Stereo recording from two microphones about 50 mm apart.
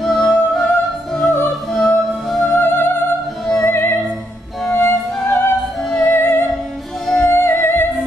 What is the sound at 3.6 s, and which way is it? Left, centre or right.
Opera, left.